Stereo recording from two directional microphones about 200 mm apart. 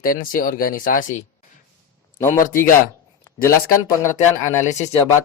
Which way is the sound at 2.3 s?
45° left (ahead or behind).